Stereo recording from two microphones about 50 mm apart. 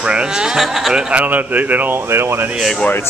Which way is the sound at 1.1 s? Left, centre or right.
Right.